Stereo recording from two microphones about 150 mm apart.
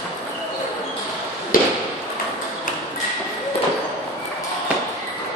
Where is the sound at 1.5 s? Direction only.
65° left (ahead or behind).